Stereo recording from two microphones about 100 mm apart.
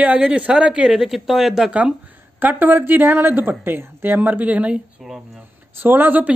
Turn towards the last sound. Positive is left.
turn(degrees=-20)  # may be behind; listen again after turning